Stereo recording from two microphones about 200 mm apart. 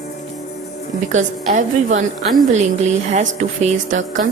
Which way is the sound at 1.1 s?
40° right (ahead or behind).